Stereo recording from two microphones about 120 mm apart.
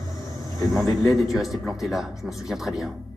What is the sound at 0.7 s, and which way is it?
A man's voice, 5° right (ahead or behind).